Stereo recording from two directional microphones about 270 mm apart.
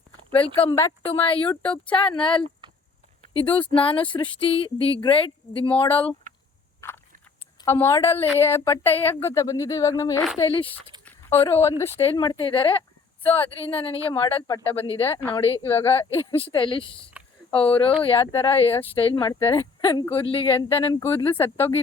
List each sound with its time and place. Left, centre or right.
0.6 s speech: centre
3.3 s speech: centre
7.6 s speech: centre
11.0 s a sound: centre
11.9 s speech: centre
15.0 s speech: centre